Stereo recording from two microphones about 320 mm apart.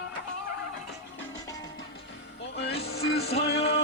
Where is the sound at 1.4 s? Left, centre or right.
Centre.